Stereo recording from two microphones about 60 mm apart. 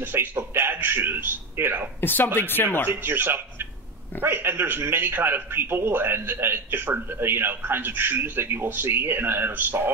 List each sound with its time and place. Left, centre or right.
0.0 s a man's voice: right
2.0 s speech: left
2.9 s a man's voice: right